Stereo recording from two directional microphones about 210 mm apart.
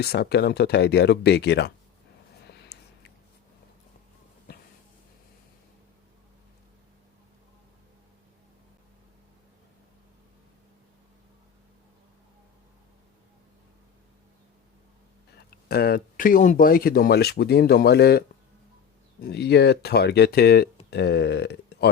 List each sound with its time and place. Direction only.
0.0 s speech: 50° left (ahead or behind)
2.5 s a sound: 50° left (ahead or behind)
15.4 s speech: 50° left (ahead or behind)
19.2 s speech: 50° left (ahead or behind)